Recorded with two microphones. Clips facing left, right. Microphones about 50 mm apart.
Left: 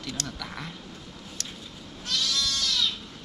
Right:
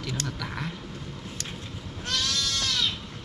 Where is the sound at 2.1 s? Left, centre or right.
Right.